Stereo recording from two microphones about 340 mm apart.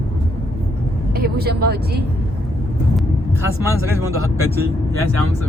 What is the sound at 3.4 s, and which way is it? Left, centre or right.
Speech, centre.